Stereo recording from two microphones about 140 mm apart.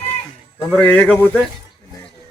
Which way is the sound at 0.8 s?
10° left (ahead or behind).